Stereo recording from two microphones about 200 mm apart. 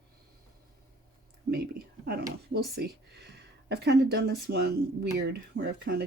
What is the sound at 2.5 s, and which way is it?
Speech, 55° right (ahead or behind).